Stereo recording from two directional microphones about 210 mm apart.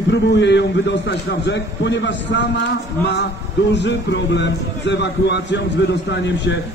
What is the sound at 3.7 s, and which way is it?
A man's voice, 55° left (ahead or behind).